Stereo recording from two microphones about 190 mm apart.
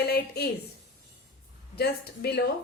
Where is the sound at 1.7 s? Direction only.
55° left (ahead or behind).